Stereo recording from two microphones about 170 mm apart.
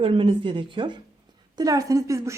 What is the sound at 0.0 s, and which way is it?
A woman's voice, 30° right (ahead or behind).